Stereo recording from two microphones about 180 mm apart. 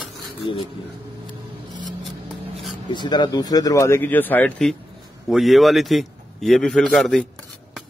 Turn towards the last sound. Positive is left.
turn(degrees=0)  # may be behind; listen again after turning